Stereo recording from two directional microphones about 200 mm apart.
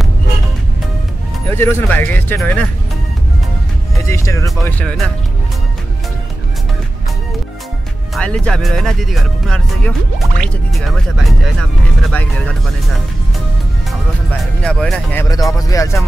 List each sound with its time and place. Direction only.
1.5 s speech: 10° left (ahead or behind)
3.9 s speech: 15° left (ahead or behind)
8.1 s speech: 5° left (ahead or behind)
14.6 s speech: 5° left (ahead or behind)
15.2 s speech: 15° left (ahead or behind)